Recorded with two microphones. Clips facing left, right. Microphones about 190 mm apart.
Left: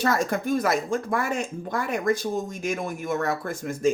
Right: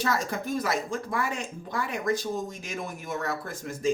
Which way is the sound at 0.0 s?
55° left (ahead or behind).